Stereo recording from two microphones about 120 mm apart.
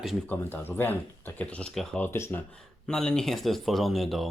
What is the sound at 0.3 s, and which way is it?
Speech, 15° left (ahead or behind).